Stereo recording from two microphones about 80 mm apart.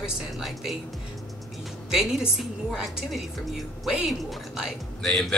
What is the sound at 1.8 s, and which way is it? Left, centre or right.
A woman's voice, centre.